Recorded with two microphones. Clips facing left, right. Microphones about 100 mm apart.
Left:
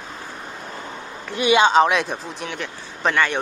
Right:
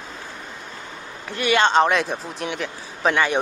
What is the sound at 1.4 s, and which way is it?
Speech, 15° left (ahead or behind).